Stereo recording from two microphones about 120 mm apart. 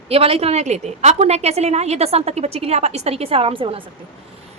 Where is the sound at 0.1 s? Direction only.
55° right (ahead or behind).